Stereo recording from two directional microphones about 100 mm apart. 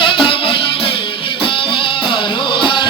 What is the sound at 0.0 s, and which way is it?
Music, 60° left (ahead or behind).